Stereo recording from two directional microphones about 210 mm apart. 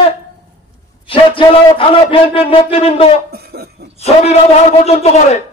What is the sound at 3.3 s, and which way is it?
Cough, 50° right (ahead or behind).